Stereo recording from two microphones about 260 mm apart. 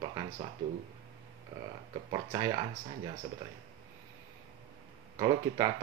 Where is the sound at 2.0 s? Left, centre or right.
Centre.